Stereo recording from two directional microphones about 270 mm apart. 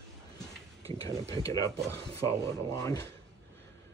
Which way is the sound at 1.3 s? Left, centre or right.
Centre.